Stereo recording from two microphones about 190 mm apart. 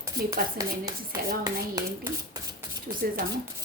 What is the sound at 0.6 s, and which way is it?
A child's voice, 20° right (ahead or behind).